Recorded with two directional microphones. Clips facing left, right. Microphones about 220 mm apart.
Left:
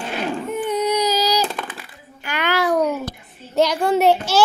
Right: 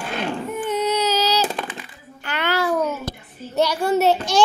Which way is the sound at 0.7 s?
15° left (ahead or behind).